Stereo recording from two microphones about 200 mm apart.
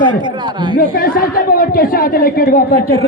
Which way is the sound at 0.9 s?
45° left (ahead or behind).